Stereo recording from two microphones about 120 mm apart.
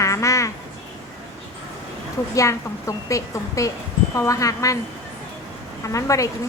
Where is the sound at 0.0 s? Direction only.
25° left (ahead or behind).